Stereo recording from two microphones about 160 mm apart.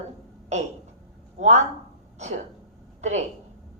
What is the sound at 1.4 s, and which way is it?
A woman's voice, 45° right (ahead or behind).